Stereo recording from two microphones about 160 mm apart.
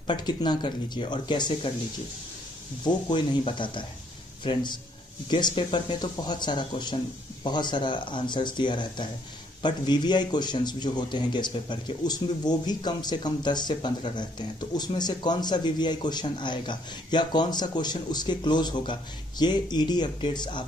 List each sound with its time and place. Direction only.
0.0 s speech: 25° left (ahead or behind)
2.8 s speech: 30° left (ahead or behind)